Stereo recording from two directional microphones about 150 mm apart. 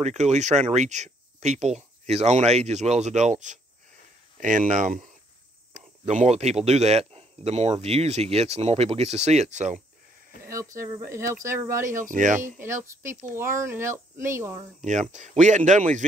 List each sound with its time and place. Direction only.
0.0 s speech: 50° right (ahead or behind)
10.5 s speech: 20° right (ahead or behind)
11.9 s speech: 60° right (ahead or behind)
12.9 s speech: 20° right (ahead or behind)
14.8 s speech: 50° right (ahead or behind)